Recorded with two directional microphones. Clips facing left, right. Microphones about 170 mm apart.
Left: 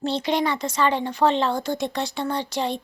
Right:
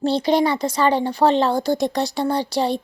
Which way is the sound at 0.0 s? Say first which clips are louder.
Right 5 dB; 35° right (ahead or behind).